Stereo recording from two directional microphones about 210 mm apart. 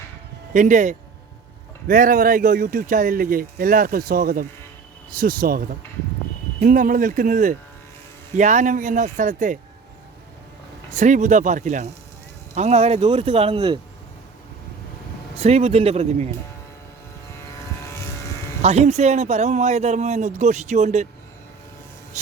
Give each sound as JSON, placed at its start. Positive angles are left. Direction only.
{"t": 0.5, "sound": "speech", "side_deg": -35}
{"t": 10.9, "sound": "speech", "side_deg": -35}
{"t": 15.4, "sound": "speech", "side_deg": -30}
{"t": 18.6, "sound": "speech", "side_deg": -30}
{"t": 22.1, "sound": "a sound", "side_deg": -35}